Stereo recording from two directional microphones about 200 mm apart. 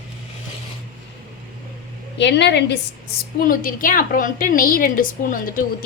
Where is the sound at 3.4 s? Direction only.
45° left (ahead or behind).